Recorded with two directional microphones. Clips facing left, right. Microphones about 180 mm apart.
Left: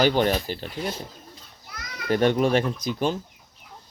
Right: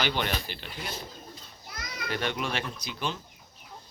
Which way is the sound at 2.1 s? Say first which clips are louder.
Left 12 dB; 45° left (ahead or behind).